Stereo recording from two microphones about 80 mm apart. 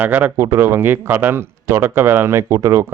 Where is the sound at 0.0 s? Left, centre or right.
Right.